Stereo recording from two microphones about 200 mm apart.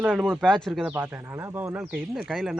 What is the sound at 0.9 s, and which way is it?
Speech, 10° right (ahead or behind).